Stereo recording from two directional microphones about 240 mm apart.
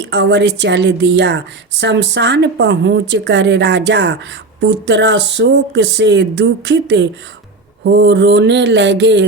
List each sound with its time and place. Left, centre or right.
0.1 s speech: right